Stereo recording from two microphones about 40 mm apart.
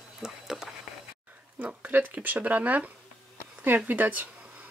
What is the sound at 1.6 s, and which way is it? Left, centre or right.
Speech, right.